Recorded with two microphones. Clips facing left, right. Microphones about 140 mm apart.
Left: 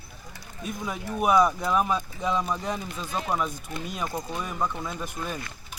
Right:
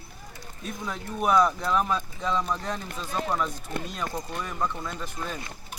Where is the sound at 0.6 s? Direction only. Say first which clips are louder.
Left 2 dB; 10° left (ahead or behind).